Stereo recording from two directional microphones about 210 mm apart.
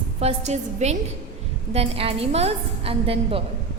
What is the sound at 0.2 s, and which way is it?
A woman's voice, 30° right (ahead or behind).